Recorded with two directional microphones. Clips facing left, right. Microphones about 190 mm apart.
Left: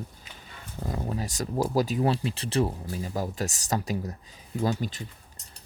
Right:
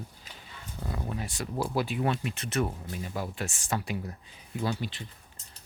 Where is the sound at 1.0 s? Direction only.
35° left (ahead or behind).